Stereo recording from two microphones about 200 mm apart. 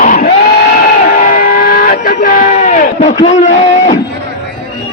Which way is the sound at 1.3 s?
45° left (ahead or behind).